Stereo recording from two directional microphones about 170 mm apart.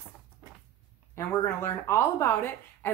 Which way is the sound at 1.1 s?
15° left (ahead or behind).